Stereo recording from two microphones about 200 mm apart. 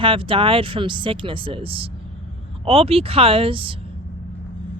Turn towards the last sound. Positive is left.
turn(degrees=-25)  # may be behind; listen again after turning